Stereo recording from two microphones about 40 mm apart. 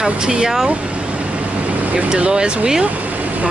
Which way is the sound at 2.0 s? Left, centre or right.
Right.